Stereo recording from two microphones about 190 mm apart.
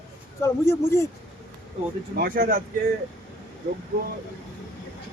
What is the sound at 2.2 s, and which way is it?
Speech, 50° right (ahead or behind).